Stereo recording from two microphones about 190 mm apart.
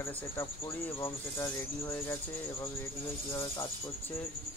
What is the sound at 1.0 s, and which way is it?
Speech, 15° left (ahead or behind).